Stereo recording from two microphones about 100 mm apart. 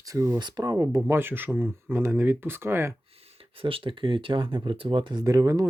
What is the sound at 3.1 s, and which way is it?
Speech, 75° right (ahead or behind).